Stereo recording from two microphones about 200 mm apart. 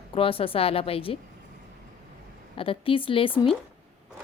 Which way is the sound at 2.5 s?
25° left (ahead or behind).